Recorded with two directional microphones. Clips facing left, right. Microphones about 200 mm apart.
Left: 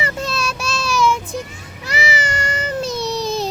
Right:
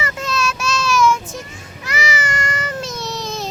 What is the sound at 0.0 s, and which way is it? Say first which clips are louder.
Child singing: right 1 dB; 35° left (ahead or behind).